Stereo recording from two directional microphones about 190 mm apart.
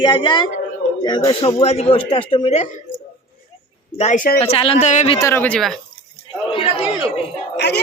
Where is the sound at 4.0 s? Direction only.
45° left (ahead or behind).